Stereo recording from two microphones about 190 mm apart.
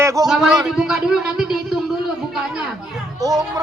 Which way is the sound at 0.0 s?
15° right (ahead or behind).